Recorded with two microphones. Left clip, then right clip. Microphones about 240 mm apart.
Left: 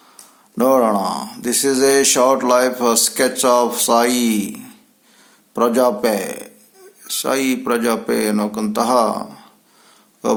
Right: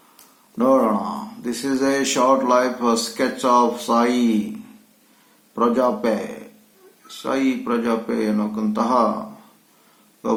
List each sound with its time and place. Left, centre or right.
0.5 s speech: left
5.5 s speech: left
7.2 s speech: left
10.2 s a sound: left